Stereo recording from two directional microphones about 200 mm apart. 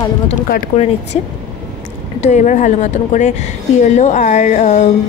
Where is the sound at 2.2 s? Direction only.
35° left (ahead or behind).